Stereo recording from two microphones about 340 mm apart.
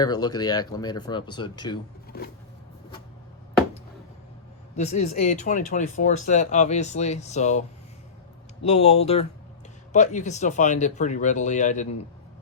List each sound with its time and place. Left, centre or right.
0.0 s speech: centre
2.1 s a sound: left
4.8 s speech: centre
8.6 s speech: centre